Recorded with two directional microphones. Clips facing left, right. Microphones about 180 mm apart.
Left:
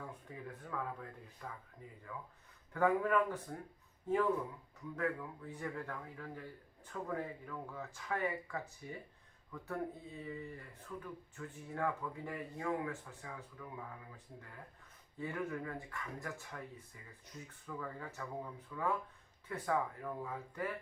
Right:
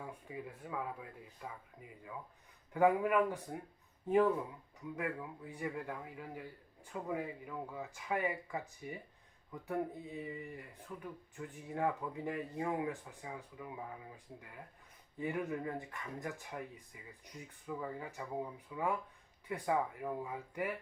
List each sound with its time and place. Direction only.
0.0 s speech: 10° right (ahead or behind)
2.7 s speech: 15° right (ahead or behind)
15.2 s speech: 15° right (ahead or behind)